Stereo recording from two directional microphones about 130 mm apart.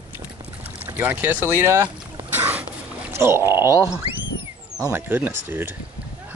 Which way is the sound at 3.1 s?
20° right (ahead or behind).